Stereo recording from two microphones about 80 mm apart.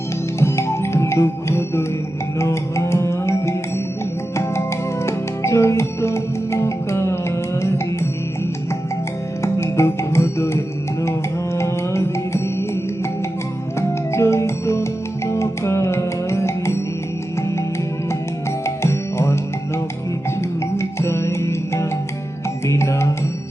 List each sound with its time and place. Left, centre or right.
0.3 s music: left
5.0 s music: left
9.4 s music: left
14.1 s music: left
18.6 s music: left
20.7 s music: left